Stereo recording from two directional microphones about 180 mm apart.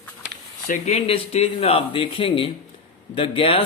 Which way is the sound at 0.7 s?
35° left (ahead or behind).